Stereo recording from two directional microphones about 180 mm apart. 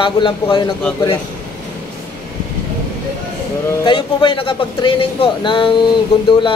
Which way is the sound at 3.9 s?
25° left (ahead or behind).